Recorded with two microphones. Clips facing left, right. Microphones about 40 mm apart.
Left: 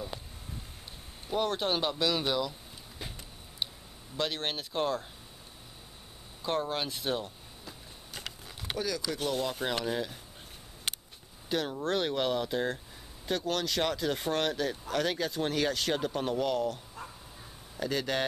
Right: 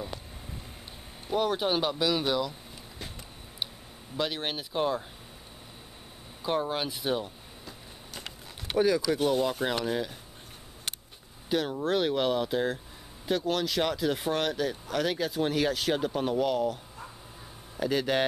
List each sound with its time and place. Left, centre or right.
1.2 s speech: centre
4.2 s speech: centre
6.4 s speech: centre
8.7 s speech: right; by 10.1 s centre
11.4 s speech: centre